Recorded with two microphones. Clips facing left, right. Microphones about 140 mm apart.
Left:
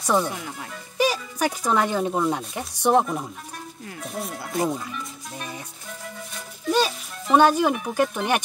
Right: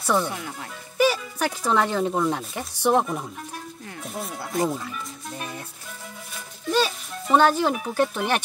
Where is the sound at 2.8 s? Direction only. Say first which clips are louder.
Left 1 dB; 15° left (ahead or behind).